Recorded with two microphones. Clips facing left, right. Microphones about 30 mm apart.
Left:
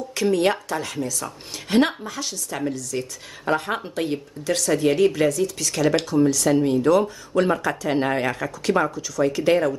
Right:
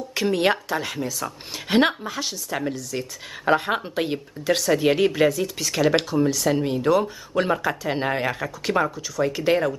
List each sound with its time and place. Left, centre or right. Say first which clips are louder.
0.1 s speech: left 1 dB; centre